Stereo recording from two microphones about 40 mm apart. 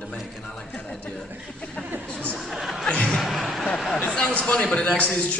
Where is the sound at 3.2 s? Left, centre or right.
Centre.